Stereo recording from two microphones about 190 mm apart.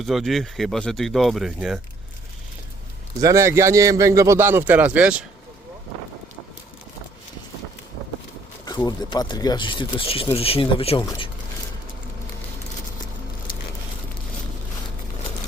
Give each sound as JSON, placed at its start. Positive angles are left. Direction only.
{"t": 0.0, "sound": "speech", "side_deg": 0}
{"t": 3.2, "sound": "a man's voice", "side_deg": -15}
{"t": 8.6, "sound": "speech", "side_deg": 20}